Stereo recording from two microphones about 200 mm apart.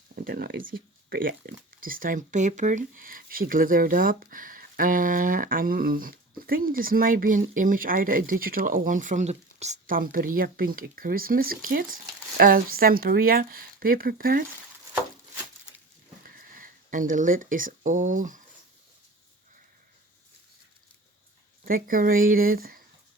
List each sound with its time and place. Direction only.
0.3 s speech: 45° right (ahead or behind)
16.2 s speech: 45° right (ahead or behind)
21.6 s speech: 45° right (ahead or behind)